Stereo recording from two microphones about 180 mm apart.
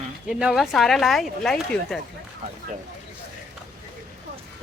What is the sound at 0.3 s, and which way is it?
Speech, 5° right (ahead or behind).